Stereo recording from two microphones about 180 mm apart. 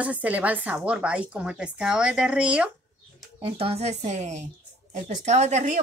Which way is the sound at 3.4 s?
30° right (ahead or behind).